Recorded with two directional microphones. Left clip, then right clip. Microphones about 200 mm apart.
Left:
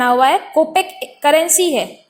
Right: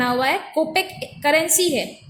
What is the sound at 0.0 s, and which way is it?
A woman's voice, 20° left (ahead or behind).